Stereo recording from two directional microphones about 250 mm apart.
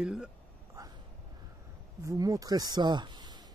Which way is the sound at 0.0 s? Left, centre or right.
Centre.